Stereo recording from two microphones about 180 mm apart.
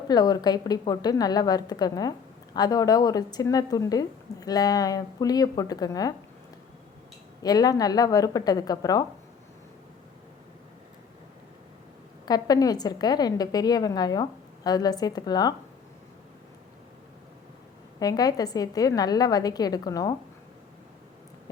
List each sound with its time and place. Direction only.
0.1 s a woman's voice: 20° left (ahead or behind)
7.4 s a woman's voice: 20° left (ahead or behind)
12.2 s a woman's voice: 20° left (ahead or behind)
18.0 s a woman's voice: 20° left (ahead or behind)